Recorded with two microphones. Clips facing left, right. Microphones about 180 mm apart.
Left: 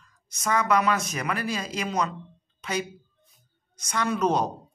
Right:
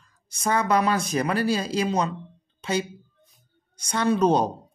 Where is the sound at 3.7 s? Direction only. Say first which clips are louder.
Right 5 dB; 30° right (ahead or behind).